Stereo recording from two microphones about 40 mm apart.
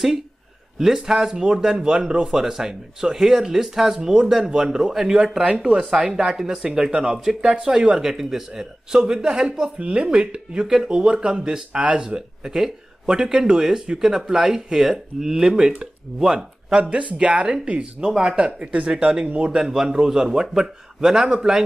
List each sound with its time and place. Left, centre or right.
0.7 s speech: centre; by 12.2 s right
12.4 s speech: centre
16.9 s speech: right
18.6 s speech: right
18.9 s speech: right
19.6 s speech: centre